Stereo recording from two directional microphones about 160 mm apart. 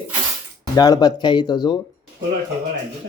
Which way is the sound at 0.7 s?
25° left (ahead or behind).